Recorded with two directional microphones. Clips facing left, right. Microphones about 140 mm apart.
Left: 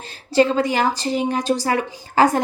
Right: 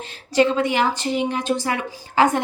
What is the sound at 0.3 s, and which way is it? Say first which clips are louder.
A woman's voice: left 1 dB; 35° left (ahead or behind).